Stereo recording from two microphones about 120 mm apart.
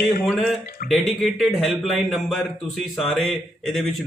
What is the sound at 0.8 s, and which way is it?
A man's voice, centre (ahead or behind).